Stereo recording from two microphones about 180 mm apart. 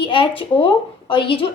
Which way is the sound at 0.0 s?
30° left (ahead or behind).